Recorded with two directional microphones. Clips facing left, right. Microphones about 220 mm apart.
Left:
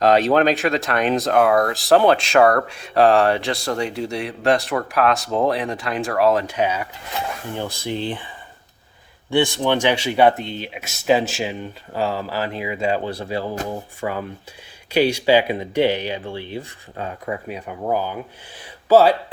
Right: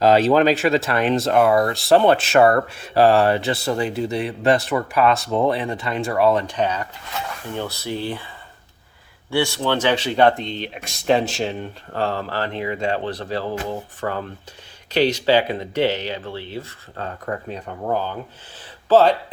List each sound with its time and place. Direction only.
0.0 s speech: centre (ahead or behind); by 8.3 s 15° left (ahead or behind)
9.3 s speech: 15° left (ahead or behind)